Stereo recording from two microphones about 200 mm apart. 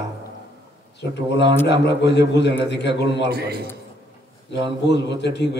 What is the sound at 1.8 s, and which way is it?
A man's voice, 60° left (ahead or behind).